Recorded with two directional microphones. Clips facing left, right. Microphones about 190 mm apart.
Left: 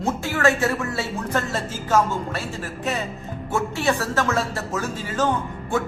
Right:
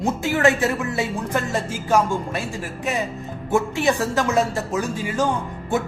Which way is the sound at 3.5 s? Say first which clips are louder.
Right 3 dB; 15° right (ahead or behind).